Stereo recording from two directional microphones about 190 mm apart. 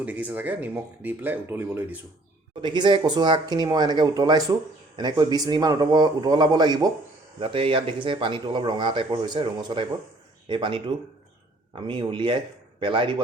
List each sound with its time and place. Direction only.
0.0 s speech: 10° right (ahead or behind)
2.6 s speech: 25° right (ahead or behind)